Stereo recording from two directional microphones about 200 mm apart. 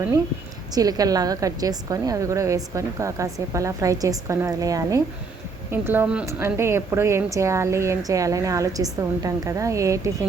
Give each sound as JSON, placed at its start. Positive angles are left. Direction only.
{"t": 0.7, "sound": "a woman's voice", "side_deg": -20}